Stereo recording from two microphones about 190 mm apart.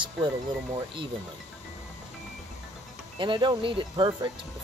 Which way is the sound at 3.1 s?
25° right (ahead or behind).